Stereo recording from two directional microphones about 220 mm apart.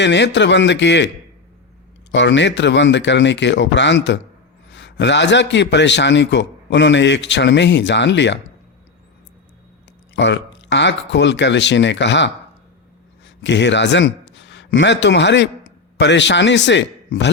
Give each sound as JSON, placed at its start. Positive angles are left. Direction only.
{"t": 0.0, "sound": "a man's voice", "side_deg": 55}
{"t": 2.1, "sound": "a man's voice", "side_deg": 55}
{"t": 10.2, "sound": "a man's voice", "side_deg": 55}